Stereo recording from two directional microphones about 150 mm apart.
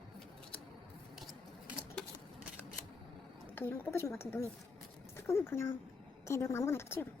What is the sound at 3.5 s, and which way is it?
A woman's voice, 15° left (ahead or behind).